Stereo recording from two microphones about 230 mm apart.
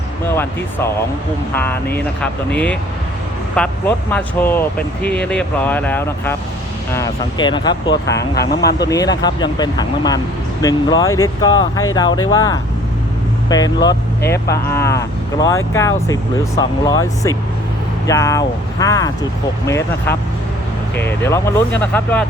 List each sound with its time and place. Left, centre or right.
1.5 s speech: centre
8.1 s speech: left
9.2 s speech: centre